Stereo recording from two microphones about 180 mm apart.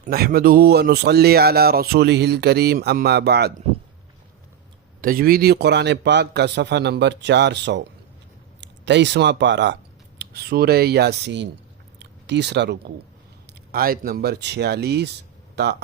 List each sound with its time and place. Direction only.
0.1 s speech: 55° right (ahead or behind)
4.9 s a man's voice: 55° right (ahead or behind); by 9.7 s 75° right (ahead or behind)
10.2 s speech: 65° right (ahead or behind)
13.5 s a man's voice: 55° right (ahead or behind)